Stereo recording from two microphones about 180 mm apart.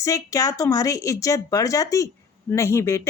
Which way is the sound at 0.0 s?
20° left (ahead or behind).